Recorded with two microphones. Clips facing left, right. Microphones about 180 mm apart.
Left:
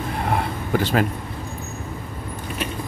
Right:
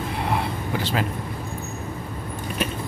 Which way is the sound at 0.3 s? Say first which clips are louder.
Left 4 dB; 50° left (ahead or behind).